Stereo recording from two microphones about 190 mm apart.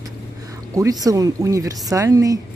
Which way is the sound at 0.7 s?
20° right (ahead or behind).